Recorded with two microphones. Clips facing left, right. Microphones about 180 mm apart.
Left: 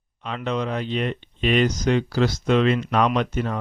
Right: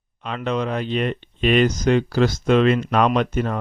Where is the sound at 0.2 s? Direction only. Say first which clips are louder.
Right 2 dB; 55° right (ahead or behind).